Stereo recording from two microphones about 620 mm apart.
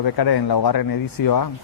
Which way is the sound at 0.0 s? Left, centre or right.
Left.